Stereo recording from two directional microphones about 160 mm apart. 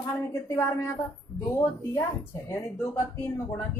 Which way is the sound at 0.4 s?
20° left (ahead or behind).